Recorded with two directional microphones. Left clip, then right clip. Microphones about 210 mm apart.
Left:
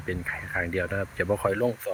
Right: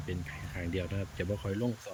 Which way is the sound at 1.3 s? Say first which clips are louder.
Left 12 dB; 35° left (ahead or behind).